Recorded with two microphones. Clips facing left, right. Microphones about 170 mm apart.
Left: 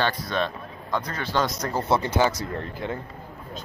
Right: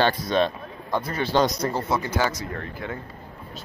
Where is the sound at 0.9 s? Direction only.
10° right (ahead or behind).